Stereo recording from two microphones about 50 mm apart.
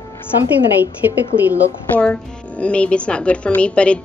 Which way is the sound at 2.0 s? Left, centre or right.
Left.